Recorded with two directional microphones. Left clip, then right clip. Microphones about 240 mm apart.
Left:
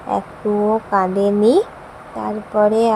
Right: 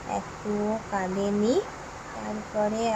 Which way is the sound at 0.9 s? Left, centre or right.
Left.